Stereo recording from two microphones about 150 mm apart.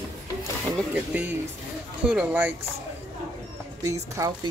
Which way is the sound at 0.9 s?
10° right (ahead or behind).